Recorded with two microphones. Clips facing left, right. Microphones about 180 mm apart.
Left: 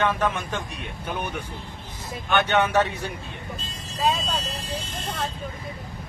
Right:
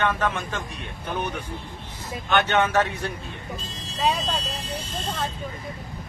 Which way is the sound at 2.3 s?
15° left (ahead or behind).